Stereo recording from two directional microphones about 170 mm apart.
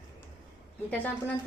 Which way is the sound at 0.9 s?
10° left (ahead or behind).